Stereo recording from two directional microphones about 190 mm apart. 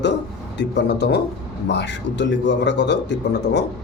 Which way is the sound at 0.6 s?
65° left (ahead or behind).